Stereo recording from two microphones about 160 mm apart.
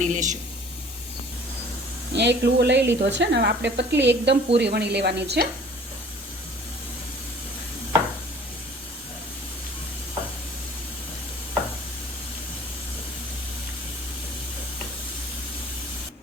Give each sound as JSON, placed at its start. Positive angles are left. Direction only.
{"t": 0.0, "sound": "speech", "side_deg": -50}
{"t": 2.1, "sound": "speech", "side_deg": -90}